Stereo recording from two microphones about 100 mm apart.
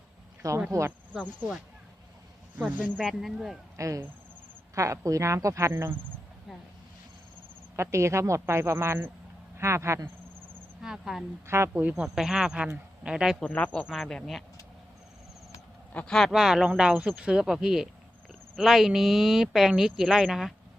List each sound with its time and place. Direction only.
0.7 s speech: 30° right (ahead or behind)
2.6 s speech: 15° right (ahead or behind)
2.9 s speech: 5° left (ahead or behind)
3.8 s speech: 30° right (ahead or behind)
7.8 s speech: 30° right (ahead or behind)
10.8 s speech: 5° right (ahead or behind)
11.4 s speech: 25° right (ahead or behind)
12.0 s speech: 5° right (ahead or behind)
13.4 s speech: 15° left (ahead or behind)
13.8 s speech: centre (ahead or behind)
15.9 s speech: 10° left (ahead or behind)